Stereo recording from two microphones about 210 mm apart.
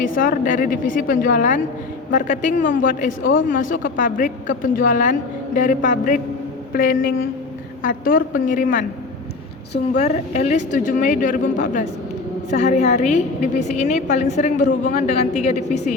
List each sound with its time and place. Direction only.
0.0 s a woman's voice: 40° left (ahead or behind)
10.0 s a woman's voice: 30° left (ahead or behind)